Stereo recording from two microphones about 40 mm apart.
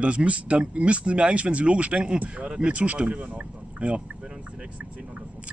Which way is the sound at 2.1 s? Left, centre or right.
Right.